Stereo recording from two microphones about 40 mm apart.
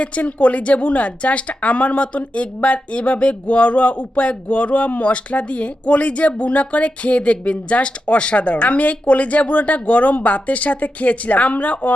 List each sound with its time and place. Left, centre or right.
0.0 s speech: left